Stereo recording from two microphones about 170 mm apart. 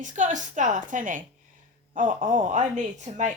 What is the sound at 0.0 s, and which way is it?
Speech, 50° right (ahead or behind).